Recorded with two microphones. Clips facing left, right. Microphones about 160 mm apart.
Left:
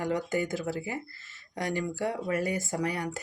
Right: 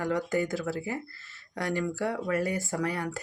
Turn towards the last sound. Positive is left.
turn(degrees=20)  # may be behind; listen again after turning